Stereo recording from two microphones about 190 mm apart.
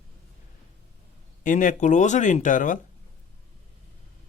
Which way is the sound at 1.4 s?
45° left (ahead or behind).